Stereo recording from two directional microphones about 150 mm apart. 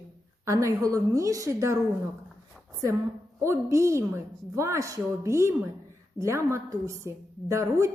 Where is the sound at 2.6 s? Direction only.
Centre (ahead or behind).